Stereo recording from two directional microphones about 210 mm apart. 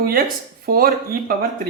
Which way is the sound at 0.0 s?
45° right (ahead or behind).